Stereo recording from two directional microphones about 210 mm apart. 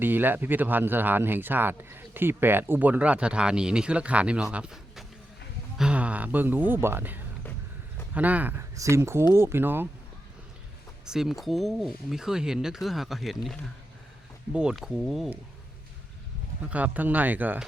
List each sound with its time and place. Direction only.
0.0 s speech: 10° right (ahead or behind)
11.0 s speech: centre (ahead or behind)
16.6 s speech: 5° right (ahead or behind)